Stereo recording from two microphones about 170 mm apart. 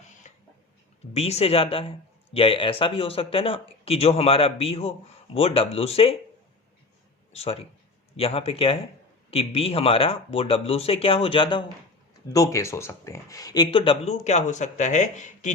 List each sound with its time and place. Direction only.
1.1 s a man's voice: 35° left (ahead or behind)
7.3 s a man's voice: 35° left (ahead or behind)